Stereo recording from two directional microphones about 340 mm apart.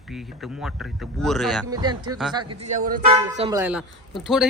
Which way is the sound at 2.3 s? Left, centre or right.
Right.